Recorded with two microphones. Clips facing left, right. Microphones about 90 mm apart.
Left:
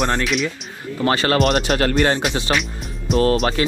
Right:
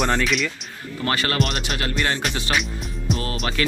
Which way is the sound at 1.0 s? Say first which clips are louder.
Left 6 dB; 30° left (ahead or behind).